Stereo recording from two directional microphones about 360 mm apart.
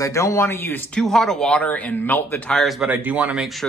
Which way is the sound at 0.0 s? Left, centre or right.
Centre.